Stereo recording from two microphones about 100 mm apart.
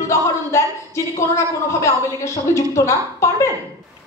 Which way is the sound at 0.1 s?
30° left (ahead or behind).